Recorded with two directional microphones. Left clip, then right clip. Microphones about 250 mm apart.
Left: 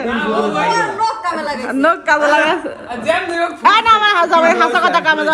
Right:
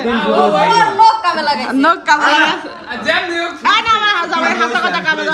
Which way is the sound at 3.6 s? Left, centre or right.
Centre.